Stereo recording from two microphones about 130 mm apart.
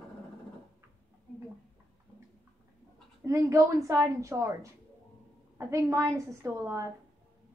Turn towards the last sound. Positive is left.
turn(degrees=-25)  # may be behind; listen again after turning